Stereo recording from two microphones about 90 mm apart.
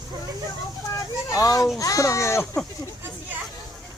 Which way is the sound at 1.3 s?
40° left (ahead or behind).